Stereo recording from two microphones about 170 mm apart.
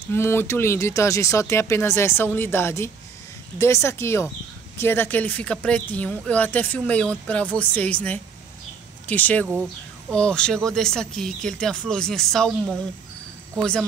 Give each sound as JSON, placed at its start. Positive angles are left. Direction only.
{"t": 0.1, "sound": "speech", "side_deg": 15}